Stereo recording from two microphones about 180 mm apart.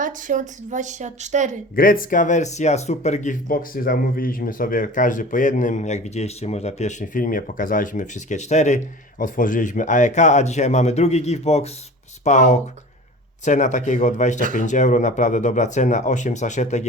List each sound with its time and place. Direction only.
0.0 s speech: 45° right (ahead or behind)
1.7 s speech: 50° left (ahead or behind)